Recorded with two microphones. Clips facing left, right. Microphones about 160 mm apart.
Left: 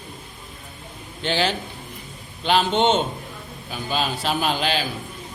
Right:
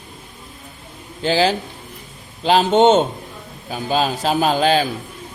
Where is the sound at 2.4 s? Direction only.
40° right (ahead or behind).